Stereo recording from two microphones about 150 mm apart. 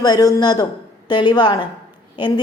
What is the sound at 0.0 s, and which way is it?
A woman's voice, 25° left (ahead or behind).